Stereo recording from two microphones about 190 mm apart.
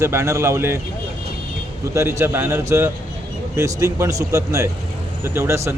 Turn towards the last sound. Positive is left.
turn(degrees=-15)  # may be behind; listen again after turning